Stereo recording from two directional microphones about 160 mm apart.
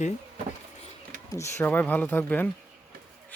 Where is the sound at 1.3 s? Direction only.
10° left (ahead or behind).